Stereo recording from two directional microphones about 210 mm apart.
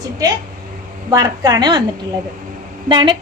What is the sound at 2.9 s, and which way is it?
Speech, 20° right (ahead or behind).